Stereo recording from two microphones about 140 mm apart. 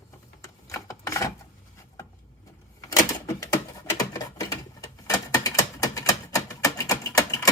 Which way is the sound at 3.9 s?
25° left (ahead or behind).